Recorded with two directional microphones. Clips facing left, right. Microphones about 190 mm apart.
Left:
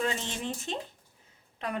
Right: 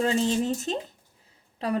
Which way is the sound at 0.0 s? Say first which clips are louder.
Right 9 dB; 35° right (ahead or behind).